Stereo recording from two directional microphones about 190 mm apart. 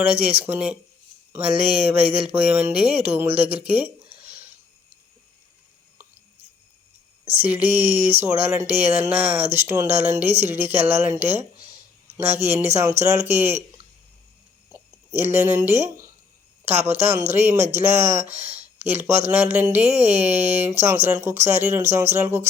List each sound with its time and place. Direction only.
0.0 s speech: 10° right (ahead or behind)
7.3 s speech: 10° right (ahead or behind)
14.7 s a sound: 15° right (ahead or behind)
16.6 s speech: 10° right (ahead or behind)
18.3 s speech: 35° right (ahead or behind)
18.8 s speech: 10° right (ahead or behind)
19.8 s speech: 35° right (ahead or behind)
20.2 s speech: 10° right (ahead or behind)